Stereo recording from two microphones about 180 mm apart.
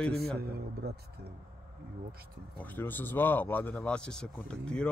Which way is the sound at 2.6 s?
10° left (ahead or behind).